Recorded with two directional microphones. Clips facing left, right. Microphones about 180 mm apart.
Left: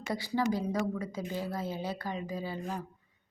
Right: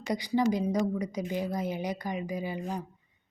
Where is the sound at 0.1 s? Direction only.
15° right (ahead or behind).